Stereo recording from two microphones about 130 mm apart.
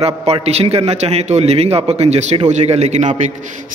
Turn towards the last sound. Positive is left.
turn(degrees=-60)  # may be behind; listen again after turning